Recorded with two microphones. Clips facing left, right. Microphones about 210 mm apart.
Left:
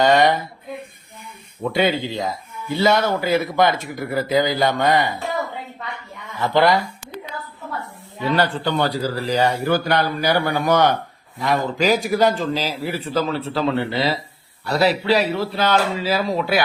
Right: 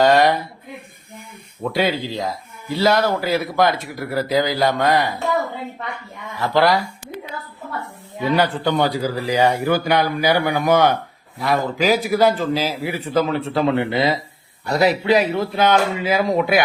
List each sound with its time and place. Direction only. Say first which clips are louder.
0.0 s a woman's voice: right 1 dB; centre (ahead or behind)
1.6 s speech: left 1 dB; centre (ahead or behind)
6.4 s speech: even; centre (ahead or behind)
8.2 s speech: right 2 dB; 10° right (ahead or behind)
13.4 s a man's voice: right 2 dB; 20° right (ahead or behind)
14.7 s speech: right 1 dB; 10° right (ahead or behind)